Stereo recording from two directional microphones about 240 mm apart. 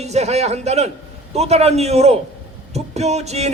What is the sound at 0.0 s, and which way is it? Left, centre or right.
Speech, right.